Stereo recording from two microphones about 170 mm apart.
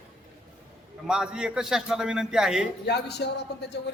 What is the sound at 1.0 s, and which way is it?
A man's voice, 5° right (ahead or behind).